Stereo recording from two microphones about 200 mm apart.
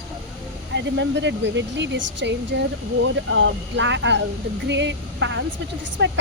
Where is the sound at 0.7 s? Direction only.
60° right (ahead or behind).